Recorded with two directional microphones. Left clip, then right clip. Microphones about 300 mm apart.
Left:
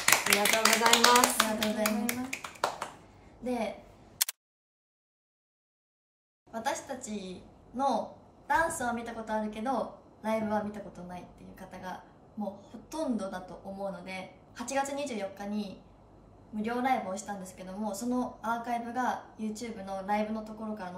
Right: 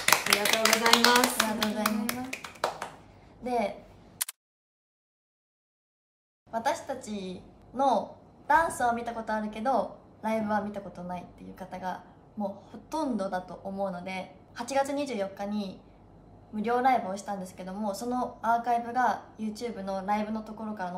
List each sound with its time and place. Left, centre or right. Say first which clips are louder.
0.6 s clapping: right 1 dB; centre
1.6 s clapping: right 1 dB; centre
3.4 s a sound: right 4 dB; centre
6.5 s a woman's voice: right 4 dB; centre